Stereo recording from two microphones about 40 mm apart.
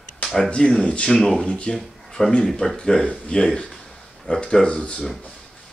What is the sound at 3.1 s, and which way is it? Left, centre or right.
Speech, left.